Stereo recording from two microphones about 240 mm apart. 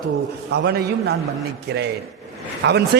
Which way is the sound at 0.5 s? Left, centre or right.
Right.